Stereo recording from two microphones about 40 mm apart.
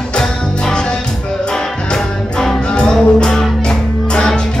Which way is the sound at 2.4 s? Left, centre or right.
Centre.